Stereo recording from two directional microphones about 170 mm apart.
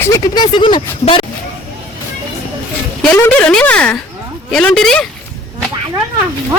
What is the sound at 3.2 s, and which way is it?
Speech, 10° left (ahead or behind).